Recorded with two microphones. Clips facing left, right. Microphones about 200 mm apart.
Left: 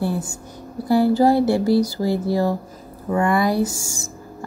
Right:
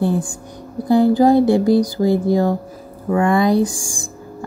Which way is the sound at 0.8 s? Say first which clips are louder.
Right 3 dB; 20° right (ahead or behind).